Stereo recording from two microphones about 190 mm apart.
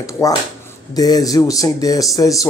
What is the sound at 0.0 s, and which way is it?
Speech, 20° left (ahead or behind).